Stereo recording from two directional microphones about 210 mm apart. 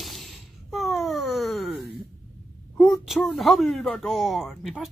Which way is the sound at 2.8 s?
Centre (ahead or behind).